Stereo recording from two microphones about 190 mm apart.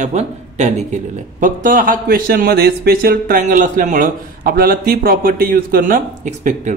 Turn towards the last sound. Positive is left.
turn(degrees=-40)  # may be behind; listen again after turning